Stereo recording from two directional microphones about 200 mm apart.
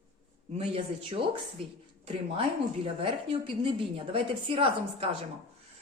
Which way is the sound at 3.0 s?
25° right (ahead or behind).